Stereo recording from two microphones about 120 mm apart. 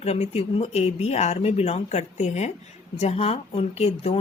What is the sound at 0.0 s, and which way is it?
A woman's voice, 60° left (ahead or behind).